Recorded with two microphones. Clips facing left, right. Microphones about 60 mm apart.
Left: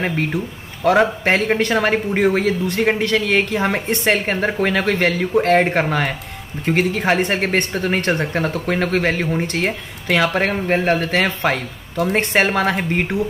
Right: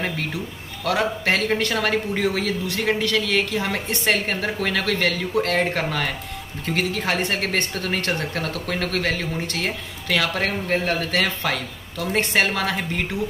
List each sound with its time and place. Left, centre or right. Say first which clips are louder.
0.0 s speech: left 6 dB; left